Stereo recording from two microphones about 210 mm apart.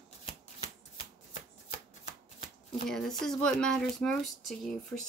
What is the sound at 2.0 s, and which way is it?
Shuffling cards, 30° left (ahead or behind).